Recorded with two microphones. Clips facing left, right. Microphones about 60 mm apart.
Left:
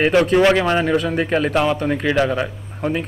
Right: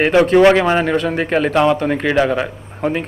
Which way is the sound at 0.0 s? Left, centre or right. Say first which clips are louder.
Right 4 dB; centre.